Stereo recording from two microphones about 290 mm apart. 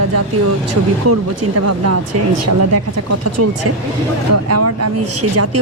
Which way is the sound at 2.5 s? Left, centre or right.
Right.